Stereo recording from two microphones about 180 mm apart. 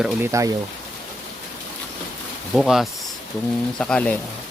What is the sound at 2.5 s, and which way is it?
Speech, centre (ahead or behind).